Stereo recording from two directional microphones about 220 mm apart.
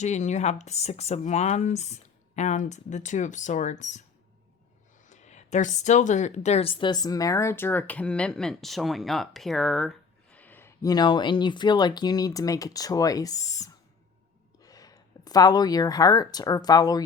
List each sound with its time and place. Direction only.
0.0 s speech: 30° left (ahead or behind)
5.0 s a woman's voice: 30° left (ahead or behind); by 17.0 s 15° left (ahead or behind)